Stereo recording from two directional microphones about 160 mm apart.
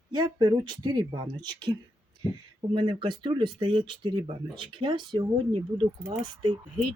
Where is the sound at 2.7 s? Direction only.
30° right (ahead or behind).